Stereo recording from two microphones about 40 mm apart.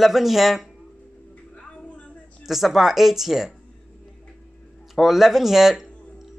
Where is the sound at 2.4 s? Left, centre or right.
Centre.